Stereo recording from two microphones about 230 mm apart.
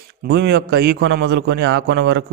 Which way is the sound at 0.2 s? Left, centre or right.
Right.